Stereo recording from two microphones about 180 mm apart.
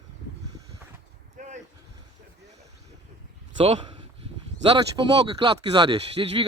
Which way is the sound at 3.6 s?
35° right (ahead or behind).